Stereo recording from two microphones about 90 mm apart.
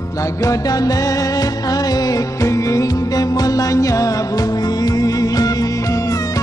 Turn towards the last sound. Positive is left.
turn(degrees=40)  # may be behind; listen again after turning